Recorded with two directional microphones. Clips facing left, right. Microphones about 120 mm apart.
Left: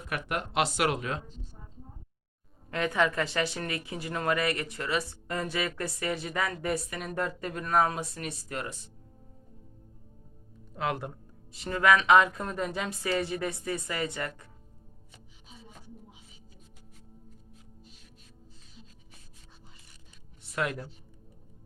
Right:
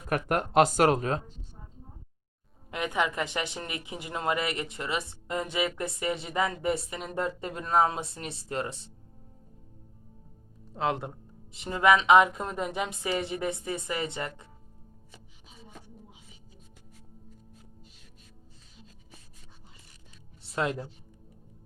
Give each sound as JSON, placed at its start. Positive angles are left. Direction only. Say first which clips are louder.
{"t": 0.1, "sound": "speech", "louder": "right 6 dB", "side_deg": -40}
{"t": 2.6, "sound": "a woman's voice", "louder": "left 2 dB", "side_deg": -15}
{"t": 10.7, "sound": "a woman's voice", "louder": "right 2 dB", "side_deg": -25}
{"t": 20.4, "sound": "speech", "louder": "right 2 dB", "side_deg": -30}